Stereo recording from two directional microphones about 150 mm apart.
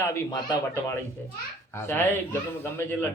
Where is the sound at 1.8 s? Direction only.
15° left (ahead or behind).